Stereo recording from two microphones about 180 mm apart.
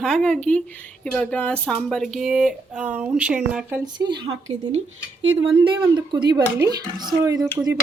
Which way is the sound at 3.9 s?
25° right (ahead or behind).